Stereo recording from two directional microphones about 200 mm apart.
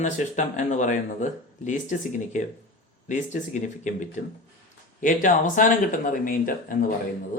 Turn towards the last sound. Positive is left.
turn(degrees=45)  # may be behind; listen again after turning